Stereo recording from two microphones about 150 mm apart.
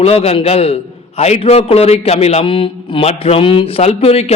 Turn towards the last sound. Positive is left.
turn(degrees=40)  # may be behind; listen again after turning